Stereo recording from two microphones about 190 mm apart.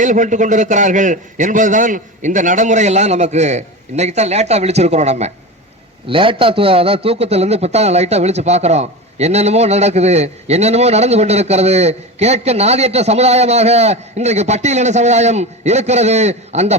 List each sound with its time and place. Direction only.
0.0 s a man's voice: 40° right (ahead or behind)